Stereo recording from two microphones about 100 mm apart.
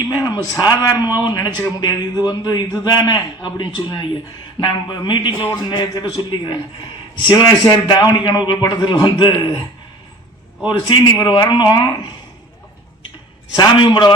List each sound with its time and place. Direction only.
0.1 s a man's voice: 40° left (ahead or behind)
10.7 s a man's voice: 45° left (ahead or behind)
13.6 s a man's voice: 50° left (ahead or behind)